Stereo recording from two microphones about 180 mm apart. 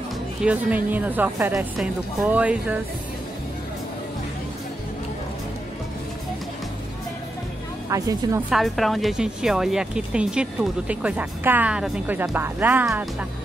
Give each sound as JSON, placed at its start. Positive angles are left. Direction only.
{"t": 0.4, "sound": "speech", "side_deg": -10}
{"t": 7.9, "sound": "speech", "side_deg": -20}
{"t": 8.5, "sound": "speech", "side_deg": 0}